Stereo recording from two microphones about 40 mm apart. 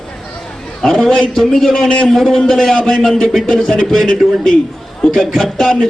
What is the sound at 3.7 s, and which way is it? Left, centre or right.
A man's voice, left.